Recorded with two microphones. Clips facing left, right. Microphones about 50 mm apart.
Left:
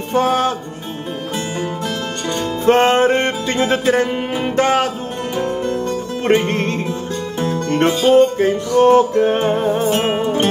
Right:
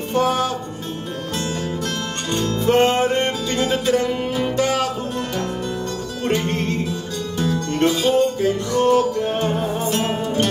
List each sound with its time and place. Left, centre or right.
0.1 s music: left
2.7 s music: left
5.5 s guitar: left
6.3 s music: left